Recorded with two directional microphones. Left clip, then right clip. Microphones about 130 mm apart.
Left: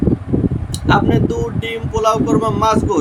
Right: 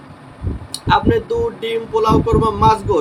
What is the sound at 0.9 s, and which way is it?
Speech, 15° left (ahead or behind).